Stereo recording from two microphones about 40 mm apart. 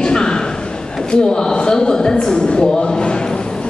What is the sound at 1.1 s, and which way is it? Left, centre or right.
Speech, centre.